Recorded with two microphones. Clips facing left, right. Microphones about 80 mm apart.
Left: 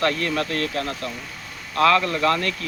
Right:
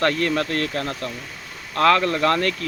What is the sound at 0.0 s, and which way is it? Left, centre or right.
Speech, right.